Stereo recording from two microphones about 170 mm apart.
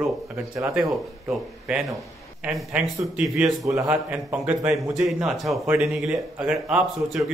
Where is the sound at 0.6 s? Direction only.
5° right (ahead or behind).